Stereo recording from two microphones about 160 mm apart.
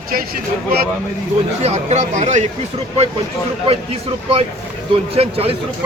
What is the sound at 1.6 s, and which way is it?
Speech, 45° right (ahead or behind).